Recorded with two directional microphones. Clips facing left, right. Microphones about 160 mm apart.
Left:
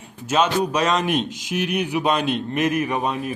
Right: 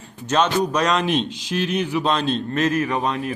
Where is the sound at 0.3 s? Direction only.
10° left (ahead or behind).